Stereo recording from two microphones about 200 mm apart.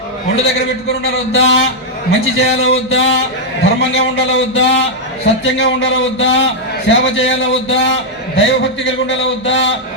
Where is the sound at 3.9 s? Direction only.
65° left (ahead or behind).